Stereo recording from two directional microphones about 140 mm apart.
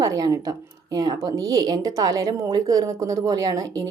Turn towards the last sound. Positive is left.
turn(degrees=-25)  # may be behind; listen again after turning